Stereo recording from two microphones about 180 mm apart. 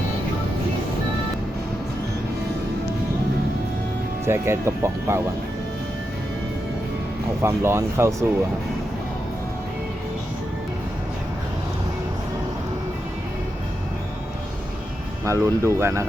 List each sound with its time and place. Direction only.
4.3 s speech: 15° right (ahead or behind)
7.4 s speech: 15° right (ahead or behind)
15.2 s speech: 15° right (ahead or behind)